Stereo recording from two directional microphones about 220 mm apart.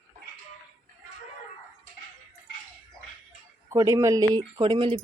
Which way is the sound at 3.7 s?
15° right (ahead or behind).